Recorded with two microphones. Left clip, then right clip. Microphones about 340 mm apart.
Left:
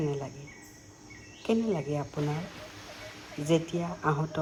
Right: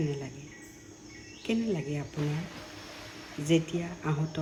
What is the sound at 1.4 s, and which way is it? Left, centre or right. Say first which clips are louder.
Speech: left 3 dB; centre.